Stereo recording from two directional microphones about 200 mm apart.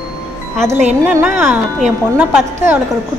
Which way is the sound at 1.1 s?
10° right (ahead or behind).